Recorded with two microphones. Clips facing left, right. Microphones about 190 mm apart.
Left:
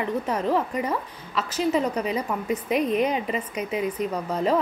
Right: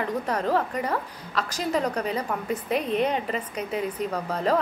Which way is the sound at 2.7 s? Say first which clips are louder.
Left 3 dB; 35° right (ahead or behind).